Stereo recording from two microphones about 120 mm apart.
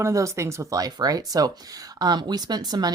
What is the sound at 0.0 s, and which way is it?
Speech, 25° right (ahead or behind).